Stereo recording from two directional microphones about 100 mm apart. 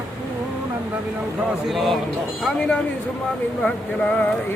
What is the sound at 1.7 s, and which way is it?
Speech, centre (ahead or behind).